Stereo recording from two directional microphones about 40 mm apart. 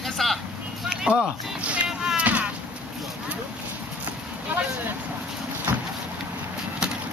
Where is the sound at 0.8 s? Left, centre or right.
Centre.